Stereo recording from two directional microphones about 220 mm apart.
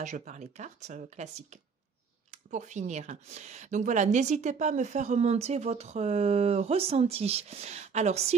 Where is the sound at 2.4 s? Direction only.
35° right (ahead or behind).